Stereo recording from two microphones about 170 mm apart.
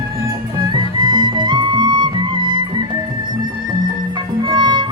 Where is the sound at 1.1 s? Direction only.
25° right (ahead or behind).